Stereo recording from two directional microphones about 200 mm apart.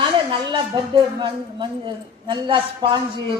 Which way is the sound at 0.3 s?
25° right (ahead or behind).